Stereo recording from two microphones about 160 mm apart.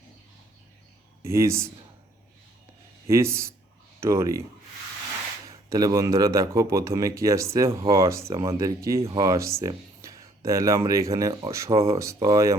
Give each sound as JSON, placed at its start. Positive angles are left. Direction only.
{"t": 1.2, "sound": "a man's voice", "side_deg": -15}
{"t": 3.1, "sound": "a man's voice", "side_deg": -15}
{"t": 5.5, "sound": "speech", "side_deg": -20}
{"t": 9.0, "sound": "speech", "side_deg": -35}
{"t": 9.2, "sound": "speech", "side_deg": -20}